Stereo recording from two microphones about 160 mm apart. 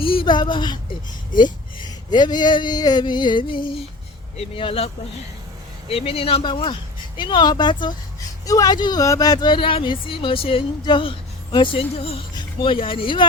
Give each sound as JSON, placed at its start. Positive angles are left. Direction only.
{"t": 0.0, "sound": "speech", "side_deg": 35}
{"t": 2.0, "sound": "speech", "side_deg": 25}
{"t": 5.9, "sound": "speech", "side_deg": 35}